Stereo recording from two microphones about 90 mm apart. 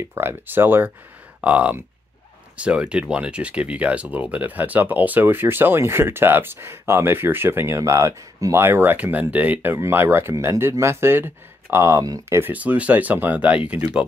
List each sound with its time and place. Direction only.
0.1 s speech: 25° right (ahead or behind)
12.4 s speech: 20° right (ahead or behind)